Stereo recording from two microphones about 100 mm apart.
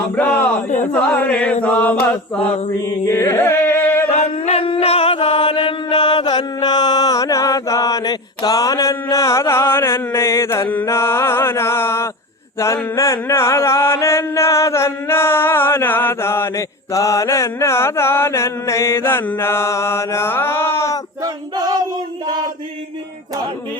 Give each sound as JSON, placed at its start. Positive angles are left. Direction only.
{"t": 0.8, "sound": "chant", "side_deg": 15}
{"t": 3.1, "sound": "carnatic music", "side_deg": 25}
{"t": 4.1, "sound": "chant", "side_deg": 90}
{"t": 10.8, "sound": "mantra", "side_deg": 25}
{"t": 21.5, "sound": "child singing", "side_deg": -40}